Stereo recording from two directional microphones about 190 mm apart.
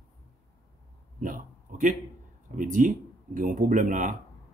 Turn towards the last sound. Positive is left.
turn(degrees=-40)  # may be behind; listen again after turning